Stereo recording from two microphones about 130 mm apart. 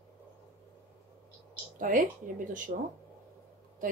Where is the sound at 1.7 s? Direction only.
90° right.